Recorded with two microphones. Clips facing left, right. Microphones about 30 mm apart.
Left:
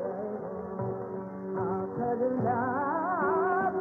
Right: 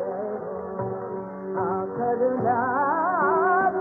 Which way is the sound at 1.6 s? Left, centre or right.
Centre.